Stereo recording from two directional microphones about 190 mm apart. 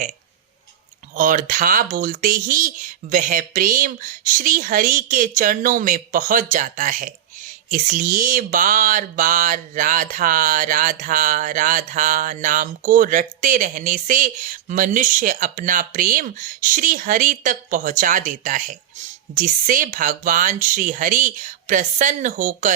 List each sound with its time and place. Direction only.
1.1 s speech: 45° right (ahead or behind)